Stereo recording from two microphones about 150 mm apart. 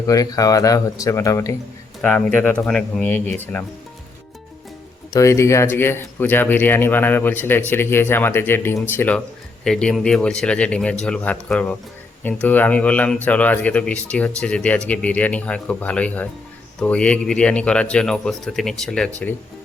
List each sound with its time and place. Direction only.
0.1 s speech: 25° left (ahead or behind)
2.0 s speech: 10° left (ahead or behind)
5.1 s speech: 20° left (ahead or behind)